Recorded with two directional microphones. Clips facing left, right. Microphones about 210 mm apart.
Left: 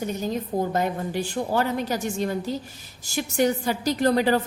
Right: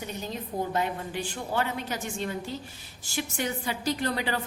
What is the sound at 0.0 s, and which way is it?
A woman's voice, 45° left (ahead or behind).